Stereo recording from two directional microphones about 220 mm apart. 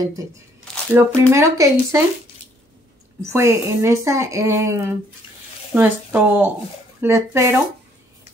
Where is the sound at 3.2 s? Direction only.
10° right (ahead or behind).